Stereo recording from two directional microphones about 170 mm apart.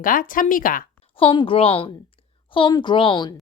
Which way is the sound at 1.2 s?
30° left (ahead or behind).